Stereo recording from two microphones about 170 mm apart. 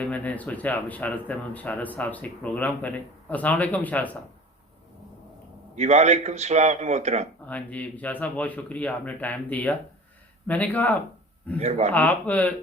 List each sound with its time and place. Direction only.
0.0 s speech: 10° left (ahead or behind)
5.7 s a man's voice: 40° right (ahead or behind)
7.4 s speech: 10° left (ahead or behind)